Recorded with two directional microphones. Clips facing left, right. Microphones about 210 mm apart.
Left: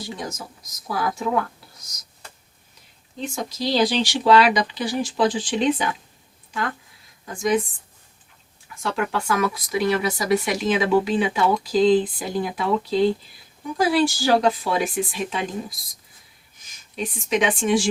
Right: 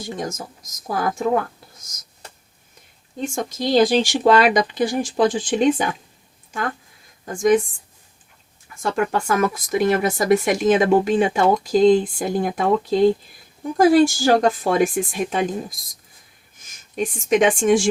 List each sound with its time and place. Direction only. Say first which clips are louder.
0.0 s speech: right 4 dB; 45° right (ahead or behind)
1.8 s a sound: right 2 dB; 45° right (ahead or behind)
3.2 s speech: right 3 dB; 50° right (ahead or behind)
8.8 s speech: right 4 dB; 45° right (ahead or behind)
16.6 s speech: right 5 dB; 50° right (ahead or behind)